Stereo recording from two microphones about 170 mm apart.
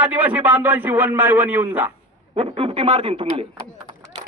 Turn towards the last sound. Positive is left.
turn(degrees=-30)  # may be behind; listen again after turning